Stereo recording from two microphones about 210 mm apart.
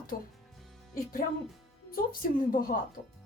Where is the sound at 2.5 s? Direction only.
40° left (ahead or behind).